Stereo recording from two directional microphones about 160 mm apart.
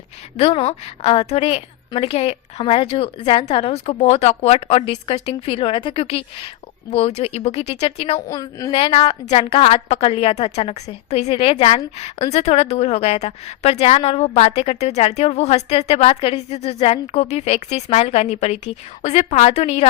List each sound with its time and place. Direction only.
0.3 s a woman's voice: 35° left (ahead or behind)
8.3 s a woman's voice: 20° left (ahead or behind)
8.7 s a woman's voice: 35° left (ahead or behind)